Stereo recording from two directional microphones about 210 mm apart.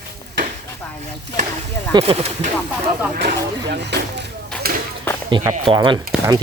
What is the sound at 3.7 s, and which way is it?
Speech, 55° right (ahead or behind).